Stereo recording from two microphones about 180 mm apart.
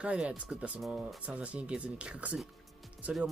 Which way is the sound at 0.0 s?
5° right (ahead or behind).